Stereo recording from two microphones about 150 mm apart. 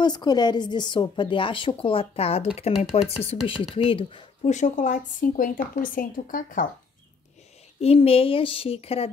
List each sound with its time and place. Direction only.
0.0 s a woman's voice: 30° left (ahead or behind); by 3.1 s 45° left (ahead or behind)
3.4 s speech: 35° left (ahead or behind); by 6.7 s 65° left (ahead or behind)
7.8 s a woman's voice: 40° left (ahead or behind)